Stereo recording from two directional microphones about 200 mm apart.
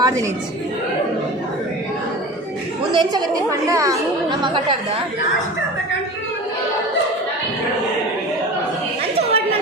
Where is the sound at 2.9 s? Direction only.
20° right (ahead or behind).